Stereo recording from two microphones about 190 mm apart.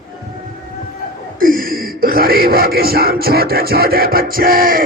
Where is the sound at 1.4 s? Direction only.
50° right (ahead or behind).